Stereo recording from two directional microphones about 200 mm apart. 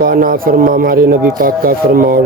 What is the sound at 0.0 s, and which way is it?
Speech, 45° right (ahead or behind).